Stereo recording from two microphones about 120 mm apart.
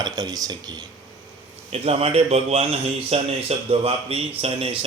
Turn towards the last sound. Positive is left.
turn(degrees=-50)  # may be behind; listen again after turning